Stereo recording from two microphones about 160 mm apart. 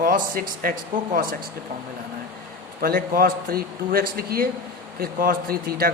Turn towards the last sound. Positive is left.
turn(degrees=-70)  # may be behind; listen again after turning